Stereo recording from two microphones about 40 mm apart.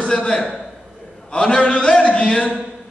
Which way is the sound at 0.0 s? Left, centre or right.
Left.